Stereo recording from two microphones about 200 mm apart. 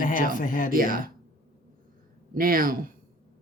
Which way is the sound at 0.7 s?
45° right (ahead or behind).